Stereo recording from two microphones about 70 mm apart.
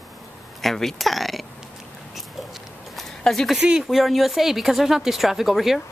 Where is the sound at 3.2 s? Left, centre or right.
Centre.